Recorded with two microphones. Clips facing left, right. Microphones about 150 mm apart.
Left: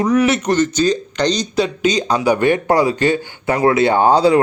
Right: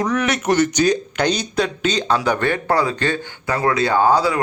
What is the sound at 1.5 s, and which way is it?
Speech, 5° left (ahead or behind).